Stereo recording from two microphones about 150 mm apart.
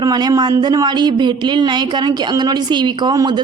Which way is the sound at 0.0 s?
25° right (ahead or behind).